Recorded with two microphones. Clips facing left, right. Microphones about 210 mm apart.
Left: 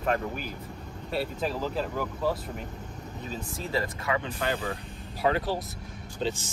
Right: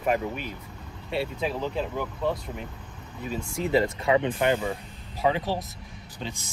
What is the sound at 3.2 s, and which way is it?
Speech, 10° right (ahead or behind).